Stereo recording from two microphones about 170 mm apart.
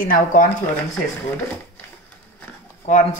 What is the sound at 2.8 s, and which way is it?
Speech, 40° left (ahead or behind).